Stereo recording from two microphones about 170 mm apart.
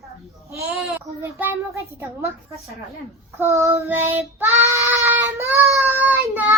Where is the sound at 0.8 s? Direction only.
10° right (ahead or behind).